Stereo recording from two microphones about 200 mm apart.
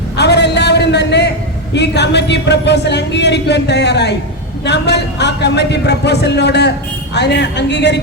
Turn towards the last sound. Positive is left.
turn(degrees=60)  # may be behind; listen again after turning